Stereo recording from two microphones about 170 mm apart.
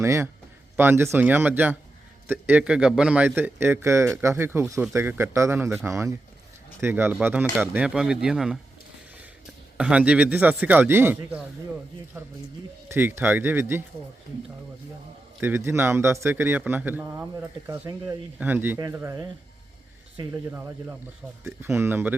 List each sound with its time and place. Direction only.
0.0 s a man's voice: 15° right (ahead or behind)
9.7 s a man's voice: 5° right (ahead or behind)
15.4 s a man's voice: 15° right (ahead or behind)
20.5 s a man's voice: 10° right (ahead or behind)